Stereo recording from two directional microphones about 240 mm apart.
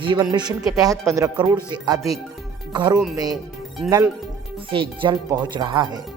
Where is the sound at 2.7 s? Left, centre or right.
Centre.